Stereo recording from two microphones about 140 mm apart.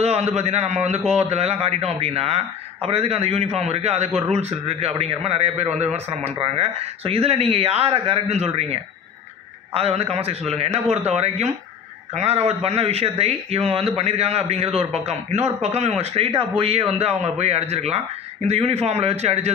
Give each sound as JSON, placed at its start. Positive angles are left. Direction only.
{"t": 0.0, "sound": "a man's voice", "side_deg": -50}
{"t": 9.8, "sound": "a man's voice", "side_deg": -45}